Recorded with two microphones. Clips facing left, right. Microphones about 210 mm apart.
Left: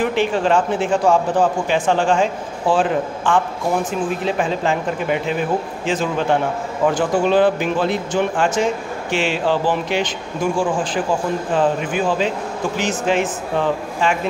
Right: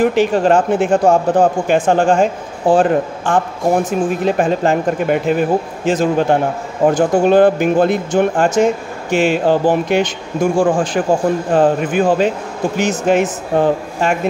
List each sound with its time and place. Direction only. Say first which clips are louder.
0.0 s speech: right 5 dB; 45° right (ahead or behind)